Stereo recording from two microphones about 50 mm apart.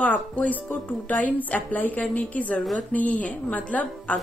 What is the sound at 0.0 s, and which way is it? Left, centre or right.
A woman's voice, left.